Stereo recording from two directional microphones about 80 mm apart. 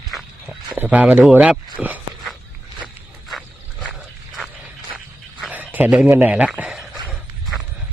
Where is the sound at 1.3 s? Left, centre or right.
Centre.